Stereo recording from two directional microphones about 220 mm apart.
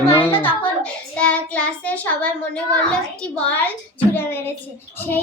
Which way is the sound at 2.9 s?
5° left (ahead or behind).